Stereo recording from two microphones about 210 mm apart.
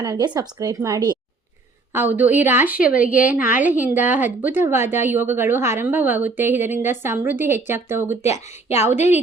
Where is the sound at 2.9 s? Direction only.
40° left (ahead or behind).